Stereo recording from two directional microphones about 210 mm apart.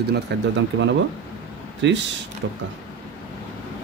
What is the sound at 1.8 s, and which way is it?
Speech, 60° right (ahead or behind).